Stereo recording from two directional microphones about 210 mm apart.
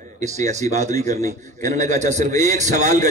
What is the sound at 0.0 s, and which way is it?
A man's voice, 35° right (ahead or behind).